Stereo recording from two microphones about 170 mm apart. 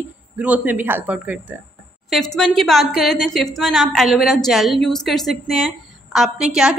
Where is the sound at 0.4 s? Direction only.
10° right (ahead or behind).